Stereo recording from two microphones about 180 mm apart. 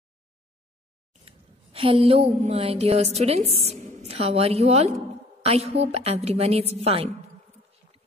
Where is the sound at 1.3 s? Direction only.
30° right (ahead or behind).